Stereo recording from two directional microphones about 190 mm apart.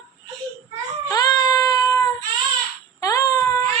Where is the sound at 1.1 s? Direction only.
20° left (ahead or behind).